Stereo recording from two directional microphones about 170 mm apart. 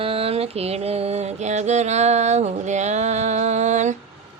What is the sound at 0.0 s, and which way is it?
Mantra, 35° right (ahead or behind).